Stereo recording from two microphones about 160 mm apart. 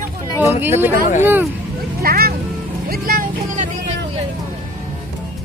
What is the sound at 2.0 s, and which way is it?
Vehicle, 70° right (ahead or behind).